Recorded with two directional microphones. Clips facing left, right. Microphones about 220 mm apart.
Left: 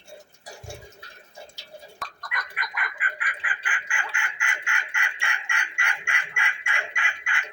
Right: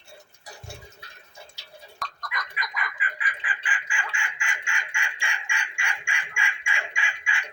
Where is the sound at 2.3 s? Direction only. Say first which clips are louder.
Even; 60° left (ahead or behind).